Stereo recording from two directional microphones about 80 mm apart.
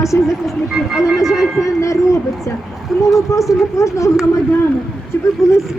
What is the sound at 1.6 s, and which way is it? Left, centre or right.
Speech, left.